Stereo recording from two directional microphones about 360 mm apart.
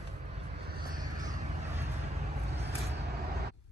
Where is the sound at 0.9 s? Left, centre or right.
Centre.